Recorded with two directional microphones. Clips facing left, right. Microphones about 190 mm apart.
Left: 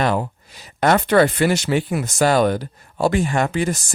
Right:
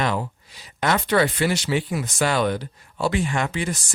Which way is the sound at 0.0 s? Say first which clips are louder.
Left 4 dB; 50° left (ahead or behind).